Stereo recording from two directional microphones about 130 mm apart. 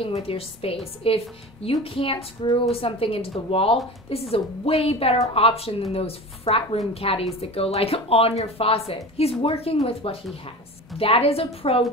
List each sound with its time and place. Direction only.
0.0 s speech: 45° left (ahead or behind)